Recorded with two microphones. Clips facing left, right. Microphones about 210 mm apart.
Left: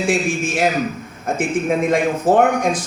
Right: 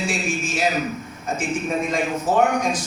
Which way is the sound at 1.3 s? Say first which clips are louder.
Left 5 dB; 55° left (ahead or behind).